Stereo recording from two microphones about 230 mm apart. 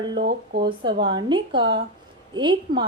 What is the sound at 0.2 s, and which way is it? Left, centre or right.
Speech, right.